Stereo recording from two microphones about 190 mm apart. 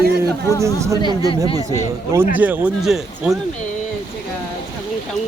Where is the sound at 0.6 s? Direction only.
15° right (ahead or behind).